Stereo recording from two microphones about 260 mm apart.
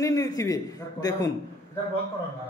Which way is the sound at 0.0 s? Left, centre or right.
Centre.